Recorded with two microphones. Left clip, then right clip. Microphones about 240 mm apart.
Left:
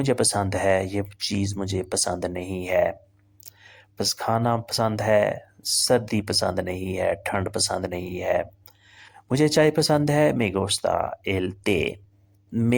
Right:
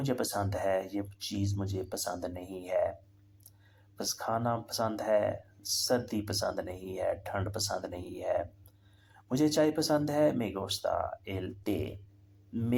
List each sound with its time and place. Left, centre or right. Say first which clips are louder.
0.0 s speech: left 10 dB; left